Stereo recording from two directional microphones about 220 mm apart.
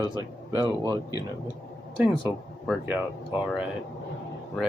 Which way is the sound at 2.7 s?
5° right (ahead or behind).